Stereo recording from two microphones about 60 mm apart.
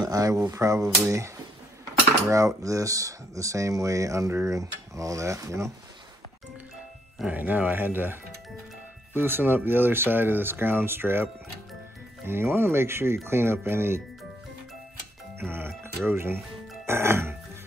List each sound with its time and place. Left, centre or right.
0.0 s speech: right
4.3 s speech: right
4.6 s speech: right
7.2 s speech: right
12.3 s speech: right
15.3 s music: right
16.1 s speech: right